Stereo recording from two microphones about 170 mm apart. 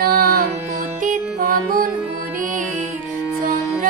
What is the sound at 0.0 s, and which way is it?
Music, 60° right (ahead or behind).